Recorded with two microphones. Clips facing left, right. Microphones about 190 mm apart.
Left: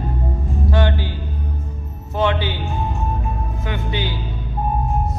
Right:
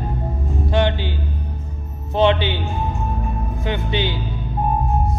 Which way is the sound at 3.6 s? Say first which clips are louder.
Right 3 dB; 25° right (ahead or behind).